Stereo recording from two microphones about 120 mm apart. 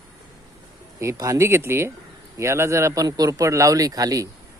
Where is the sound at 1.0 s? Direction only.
25° right (ahead or behind).